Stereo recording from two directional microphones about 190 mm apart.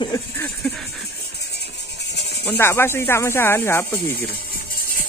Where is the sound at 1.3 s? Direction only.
60° left (ahead or behind).